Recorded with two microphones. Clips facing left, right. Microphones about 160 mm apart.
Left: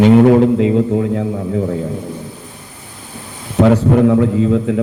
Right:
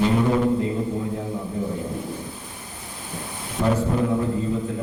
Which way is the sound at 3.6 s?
75° left (ahead or behind).